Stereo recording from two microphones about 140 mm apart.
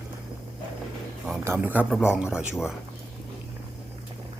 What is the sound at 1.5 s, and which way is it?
Speech, 15° right (ahead or behind).